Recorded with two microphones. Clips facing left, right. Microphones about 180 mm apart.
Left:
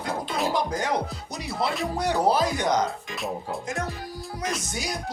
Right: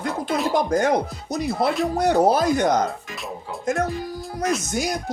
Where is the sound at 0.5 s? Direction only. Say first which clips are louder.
Right 6 dB; 50° right (ahead or behind).